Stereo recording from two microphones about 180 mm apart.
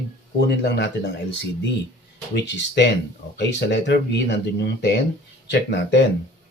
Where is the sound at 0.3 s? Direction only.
70° left (ahead or behind).